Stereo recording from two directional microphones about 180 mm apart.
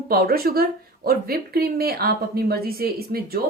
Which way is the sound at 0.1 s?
60° right (ahead or behind).